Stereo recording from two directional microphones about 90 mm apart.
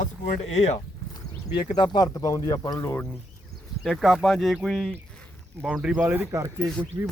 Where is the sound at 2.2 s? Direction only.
40° left (ahead or behind).